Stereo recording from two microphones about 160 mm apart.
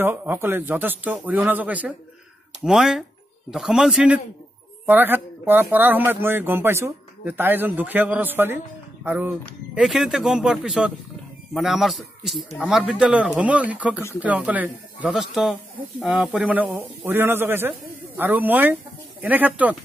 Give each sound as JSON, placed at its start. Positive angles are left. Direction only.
{"t": 0.0, "sound": "speech", "side_deg": -10}
{"t": 9.8, "sound": "speech", "side_deg": 0}